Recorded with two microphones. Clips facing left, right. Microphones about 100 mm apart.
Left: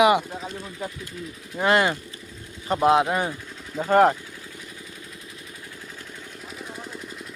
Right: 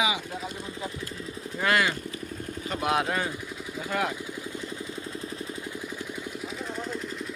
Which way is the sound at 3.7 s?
45° left (ahead or behind).